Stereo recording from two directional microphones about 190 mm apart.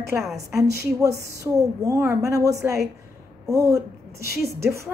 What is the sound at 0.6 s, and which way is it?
A woman's voice, 15° right (ahead or behind).